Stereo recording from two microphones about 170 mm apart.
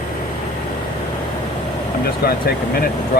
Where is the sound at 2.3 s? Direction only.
60° left (ahead or behind).